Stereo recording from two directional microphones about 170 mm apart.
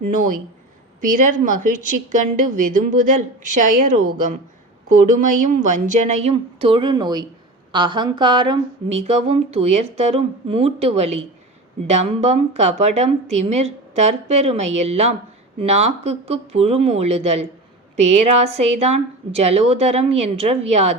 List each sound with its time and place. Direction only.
0.1 s speech: 50° right (ahead or behind)
6.3 s speech: 30° right (ahead or behind)
9.0 s speech: 40° right (ahead or behind)